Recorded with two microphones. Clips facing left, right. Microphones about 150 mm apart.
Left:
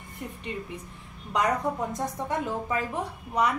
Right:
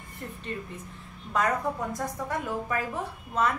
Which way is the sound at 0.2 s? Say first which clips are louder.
Left 1 dB; 10° left (ahead or behind).